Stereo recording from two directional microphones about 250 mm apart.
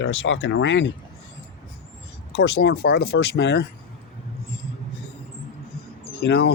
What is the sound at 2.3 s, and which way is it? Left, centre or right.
Speech, left.